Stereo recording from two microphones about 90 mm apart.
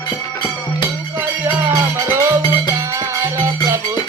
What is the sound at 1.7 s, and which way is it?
Music, 30° right (ahead or behind).